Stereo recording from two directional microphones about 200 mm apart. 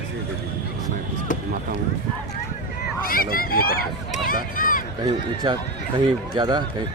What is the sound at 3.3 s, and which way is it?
Speech, 45° left (ahead or behind).